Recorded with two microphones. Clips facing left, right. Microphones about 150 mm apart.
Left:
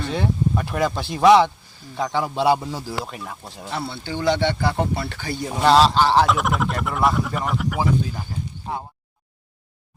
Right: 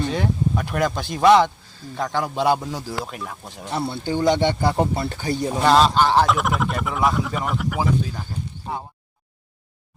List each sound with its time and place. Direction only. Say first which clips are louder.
0.0 s speech: right 1 dB; centre (ahead or behind)
3.7 s a man's voice: right 3 dB; 15° right (ahead or behind)
4.0 s speech: right 5 dB; 45° right (ahead or behind)
4.3 s a man's voice: even; 15° right (ahead or behind)
5.5 s speech: left 1 dB; centre (ahead or behind)